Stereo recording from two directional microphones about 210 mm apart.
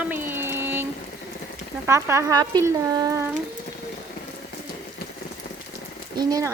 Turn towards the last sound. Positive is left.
turn(degrees=-20)  # may be behind; listen again after turning